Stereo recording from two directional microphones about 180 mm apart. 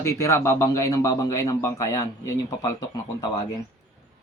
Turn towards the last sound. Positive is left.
turn(degrees=20)  # may be behind; listen again after turning